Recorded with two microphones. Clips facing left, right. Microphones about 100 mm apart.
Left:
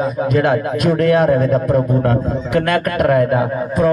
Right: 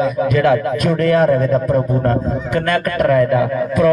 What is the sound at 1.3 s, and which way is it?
A man's voice, 45° left (ahead or behind).